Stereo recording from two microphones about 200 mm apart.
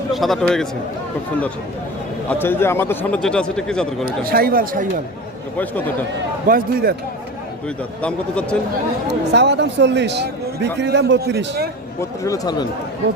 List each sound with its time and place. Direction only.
0.1 s a man's voice: centre (ahead or behind)
2.3 s a man's voice: 10° left (ahead or behind)
4.0 s speech: 45° right (ahead or behind)
6.5 s speech: 45° right (ahead or behind)
8.0 s a man's voice: 5° left (ahead or behind)
9.3 s a man's voice: 60° right (ahead or behind)
11.9 s a man's voice: 15° left (ahead or behind)